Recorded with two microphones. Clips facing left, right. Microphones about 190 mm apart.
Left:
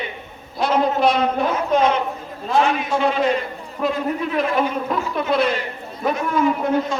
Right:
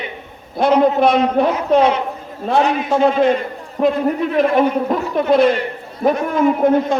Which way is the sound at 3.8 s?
50° right (ahead or behind).